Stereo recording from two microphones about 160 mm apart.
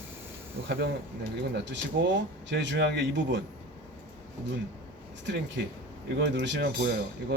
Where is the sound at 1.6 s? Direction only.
90° right.